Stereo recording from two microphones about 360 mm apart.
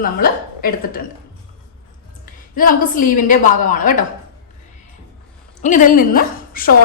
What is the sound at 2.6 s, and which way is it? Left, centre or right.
A woman's voice, left.